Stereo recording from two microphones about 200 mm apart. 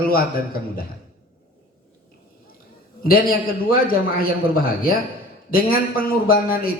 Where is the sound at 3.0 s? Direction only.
45° left (ahead or behind).